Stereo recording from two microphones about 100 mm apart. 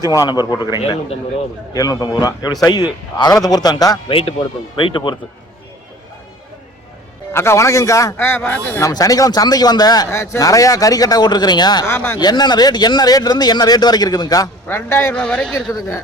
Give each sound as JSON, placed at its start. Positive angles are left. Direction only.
{"t": 0.1, "sound": "a man's voice", "side_deg": 40}
{"t": 4.1, "sound": "speech", "side_deg": 70}
{"t": 4.8, "sound": "speech", "side_deg": 55}
{"t": 7.3, "sound": "a man's voice", "side_deg": 25}
{"t": 8.1, "sound": "a man's voice", "side_deg": 20}
{"t": 8.8, "sound": "a man's voice", "side_deg": 35}
{"t": 10.1, "sound": "a man's voice", "side_deg": 30}
{"t": 11.9, "sound": "a man's voice", "side_deg": 20}
{"t": 12.1, "sound": "speech", "side_deg": 45}
{"t": 14.7, "sound": "a man's voice", "side_deg": 25}
{"t": 15.1, "sound": "speech", "side_deg": 10}
{"t": 15.7, "sound": "a man's voice", "side_deg": 30}